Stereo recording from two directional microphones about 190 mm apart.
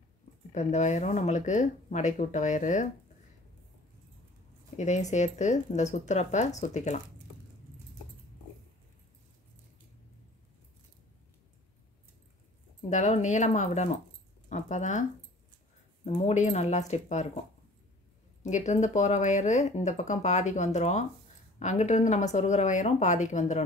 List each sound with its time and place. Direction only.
0.5 s speech: 40° left (ahead or behind)
4.7 s speech: 40° left (ahead or behind)
12.9 s speech: 40° left (ahead or behind)
18.4 s speech: 40° left (ahead or behind)